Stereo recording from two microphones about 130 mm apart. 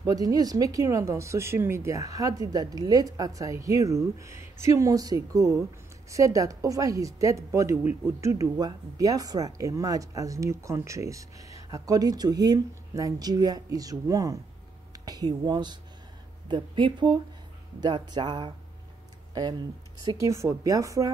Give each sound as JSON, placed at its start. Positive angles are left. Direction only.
{"t": 0.0, "sound": "a woman's voice", "side_deg": -30}
{"t": 20.2, "sound": "a woman's voice", "side_deg": -25}